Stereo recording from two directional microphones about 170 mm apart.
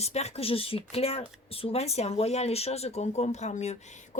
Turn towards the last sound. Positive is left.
turn(degrees=45)  # may be behind; listen again after turning